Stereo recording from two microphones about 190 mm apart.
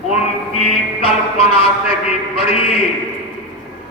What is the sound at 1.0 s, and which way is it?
Speech, 30° left (ahead or behind).